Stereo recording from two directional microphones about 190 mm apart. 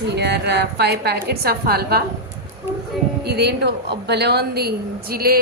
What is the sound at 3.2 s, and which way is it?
A woman's voice, 60° right (ahead or behind).